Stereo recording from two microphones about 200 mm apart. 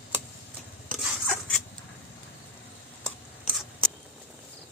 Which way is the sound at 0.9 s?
5° right (ahead or behind).